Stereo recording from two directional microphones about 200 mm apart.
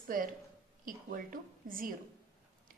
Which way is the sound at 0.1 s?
45° right (ahead or behind).